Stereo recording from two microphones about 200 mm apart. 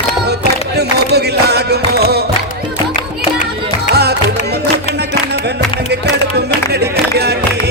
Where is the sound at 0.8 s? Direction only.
55° right (ahead or behind).